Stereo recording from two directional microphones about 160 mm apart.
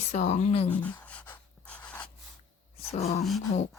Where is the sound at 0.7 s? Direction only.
10° left (ahead or behind).